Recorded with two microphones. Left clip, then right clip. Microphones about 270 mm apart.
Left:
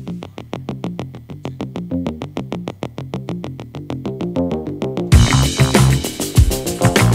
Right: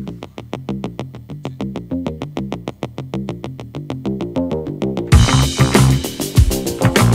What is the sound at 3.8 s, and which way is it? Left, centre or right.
Music, centre.